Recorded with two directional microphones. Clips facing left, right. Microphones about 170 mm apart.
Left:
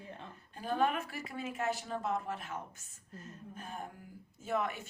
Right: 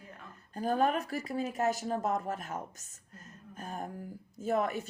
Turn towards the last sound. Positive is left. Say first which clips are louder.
# right 5 dB
turn(degrees=-40)  # may be behind; listen again after turning